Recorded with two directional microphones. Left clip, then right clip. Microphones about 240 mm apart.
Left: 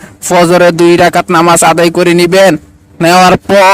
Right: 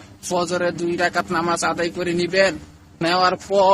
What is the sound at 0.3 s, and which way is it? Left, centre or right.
Speech, left.